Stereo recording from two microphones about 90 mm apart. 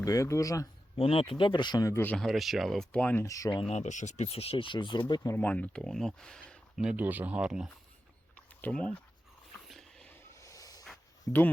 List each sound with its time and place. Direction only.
0.0 s speech: 40° left (ahead or behind)
0.9 s speech: 90° left; by 1.8 s 60° left (ahead or behind)
1.8 s speech: 30° left (ahead or behind)
2.1 s speech: centre (ahead or behind)
2.9 s speech: 15° left (ahead or behind)
3.2 s speech: 40° left (ahead or behind)
4.3 s speech: 90° left; by 5.3 s 55° left (ahead or behind)
5.4 s speech: 15° left (ahead or behind)
6.7 s speech: 10° right (ahead or behind)
7.0 s speech: 20° right (ahead or behind)
8.4 s a sound: 10° left (ahead or behind)
10.3 s a sound: 35° left (ahead or behind)
11.3 s speech: 20° left (ahead or behind)